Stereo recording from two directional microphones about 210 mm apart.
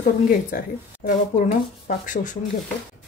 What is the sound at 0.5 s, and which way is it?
Speech, 40° left (ahead or behind).